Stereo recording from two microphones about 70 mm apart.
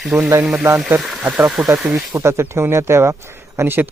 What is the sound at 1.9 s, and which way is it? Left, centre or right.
Speech, right.